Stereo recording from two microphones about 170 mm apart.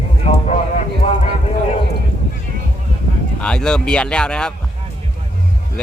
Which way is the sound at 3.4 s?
5° left (ahead or behind).